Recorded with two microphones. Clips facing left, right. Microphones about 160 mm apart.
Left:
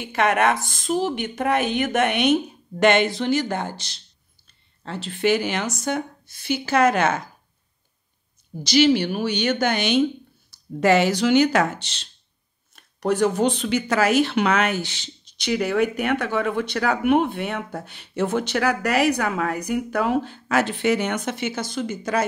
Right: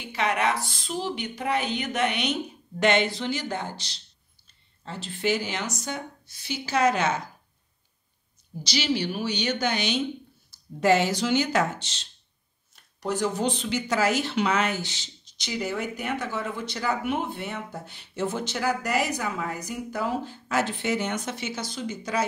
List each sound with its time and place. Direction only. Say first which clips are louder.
0.0 s a woman's voice: left 6 dB; 50° left (ahead or behind)
4.8 s speech: left 6 dB; 70° left (ahead or behind)
8.6 s speech: left 9 dB; 55° left (ahead or behind)
10.5 s speech: left 3 dB; 70° left (ahead or behind); by 22.2 s 50° left (ahead or behind)